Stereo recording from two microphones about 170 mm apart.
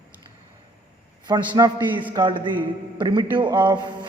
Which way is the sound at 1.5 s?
25° right (ahead or behind).